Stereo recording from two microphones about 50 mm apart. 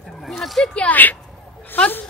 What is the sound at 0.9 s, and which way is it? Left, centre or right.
Speech, left.